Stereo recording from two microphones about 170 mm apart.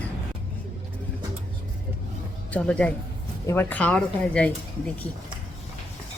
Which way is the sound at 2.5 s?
5° left (ahead or behind).